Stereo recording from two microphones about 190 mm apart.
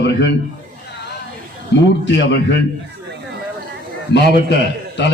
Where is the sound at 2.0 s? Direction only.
70° left (ahead or behind).